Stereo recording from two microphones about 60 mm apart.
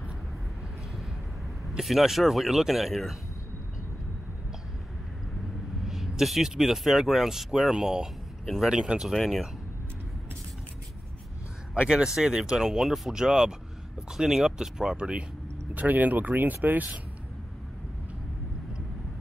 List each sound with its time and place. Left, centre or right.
1.8 s speech: centre
5.9 s speech: centre
9.1 s speech: centre
11.9 s speech: centre
15.7 s speech: right